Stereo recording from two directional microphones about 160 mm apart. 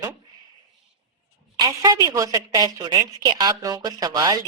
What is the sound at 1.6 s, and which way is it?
A woman's voice, 25° right (ahead or behind).